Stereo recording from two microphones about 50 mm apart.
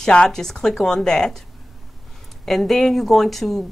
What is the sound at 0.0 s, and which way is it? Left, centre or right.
Speech, centre.